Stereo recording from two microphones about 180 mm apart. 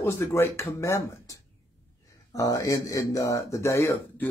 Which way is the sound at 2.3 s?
20° left (ahead or behind).